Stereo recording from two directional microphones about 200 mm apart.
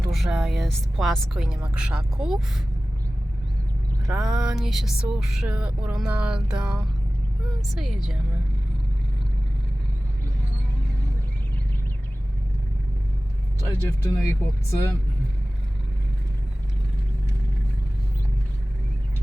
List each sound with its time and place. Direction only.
0.1 s music: 5° right (ahead or behind)
4.0 s music: 5° right (ahead or behind)
13.7 s speech: 15° left (ahead or behind)